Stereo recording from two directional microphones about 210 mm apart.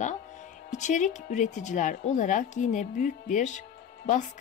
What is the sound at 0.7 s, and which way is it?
Speech, 35° left (ahead or behind).